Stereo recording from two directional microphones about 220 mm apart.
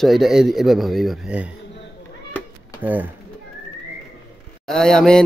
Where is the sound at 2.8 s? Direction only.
10° right (ahead or behind).